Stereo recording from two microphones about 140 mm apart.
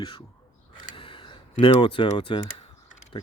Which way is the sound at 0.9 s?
35° left (ahead or behind).